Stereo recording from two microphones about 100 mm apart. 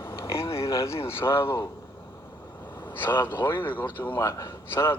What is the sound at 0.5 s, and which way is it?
A man's voice, 30° left (ahead or behind).